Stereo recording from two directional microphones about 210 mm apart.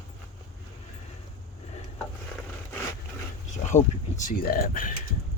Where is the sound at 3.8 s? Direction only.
35° left (ahead or behind).